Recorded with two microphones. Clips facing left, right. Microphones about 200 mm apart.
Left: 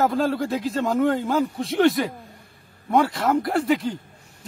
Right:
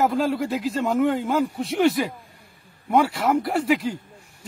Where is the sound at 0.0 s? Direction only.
5° right (ahead or behind).